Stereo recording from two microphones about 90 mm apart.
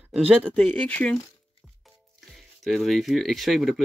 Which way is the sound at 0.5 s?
15° left (ahead or behind).